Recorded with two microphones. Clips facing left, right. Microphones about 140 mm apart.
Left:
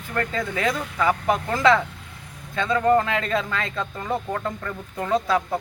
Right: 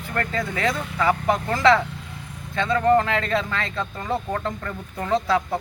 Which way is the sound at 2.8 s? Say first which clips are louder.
Right 1 dB; 15° left (ahead or behind).